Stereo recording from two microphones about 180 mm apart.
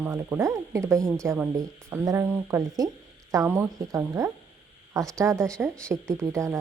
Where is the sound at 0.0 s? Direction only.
15° right (ahead or behind).